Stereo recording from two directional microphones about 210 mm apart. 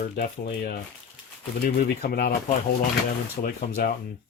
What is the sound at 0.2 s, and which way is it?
Speech, 45° left (ahead or behind).